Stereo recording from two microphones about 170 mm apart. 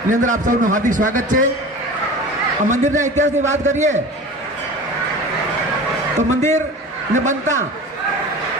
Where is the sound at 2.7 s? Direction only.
45° right (ahead or behind).